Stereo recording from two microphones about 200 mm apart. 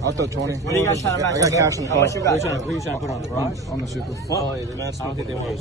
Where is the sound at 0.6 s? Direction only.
15° left (ahead or behind).